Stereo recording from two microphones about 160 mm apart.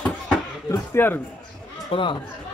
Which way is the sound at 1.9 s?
30° left (ahead or behind).